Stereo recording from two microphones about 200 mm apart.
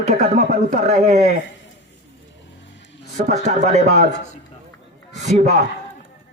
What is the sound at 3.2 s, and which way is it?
Speech, 35° right (ahead or behind).